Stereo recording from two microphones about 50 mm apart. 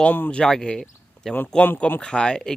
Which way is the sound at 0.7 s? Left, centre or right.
Centre.